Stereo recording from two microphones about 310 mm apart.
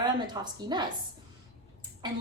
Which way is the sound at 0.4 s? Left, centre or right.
Centre.